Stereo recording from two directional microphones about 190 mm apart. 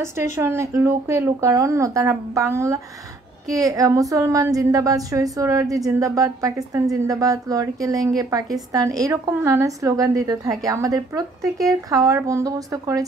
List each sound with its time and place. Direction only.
0.0 s a woman's voice: 15° right (ahead or behind)